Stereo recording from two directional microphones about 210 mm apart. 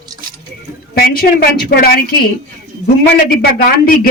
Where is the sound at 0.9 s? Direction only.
50° left (ahead or behind).